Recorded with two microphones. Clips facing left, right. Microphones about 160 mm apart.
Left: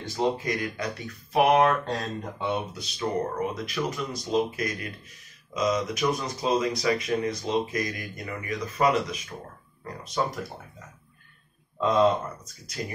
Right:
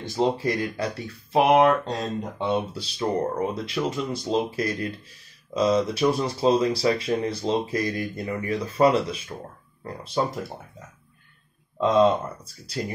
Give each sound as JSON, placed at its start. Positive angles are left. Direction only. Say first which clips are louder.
{"t": 0.1, "sound": "speech", "louder": "right 3 dB", "side_deg": -30}